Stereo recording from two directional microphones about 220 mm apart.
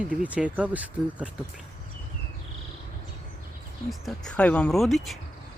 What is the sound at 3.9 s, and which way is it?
Speech, centre (ahead or behind).